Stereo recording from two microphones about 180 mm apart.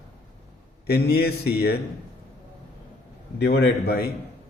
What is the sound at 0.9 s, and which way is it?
Speech, 60° left (ahead or behind).